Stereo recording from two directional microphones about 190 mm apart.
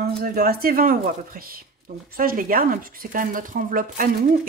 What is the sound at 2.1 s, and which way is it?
Speech, 50° right (ahead or behind).